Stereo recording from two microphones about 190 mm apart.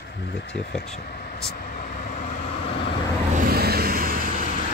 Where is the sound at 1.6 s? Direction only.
40° left (ahead or behind).